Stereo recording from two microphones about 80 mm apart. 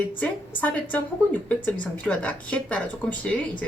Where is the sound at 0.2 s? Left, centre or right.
Left.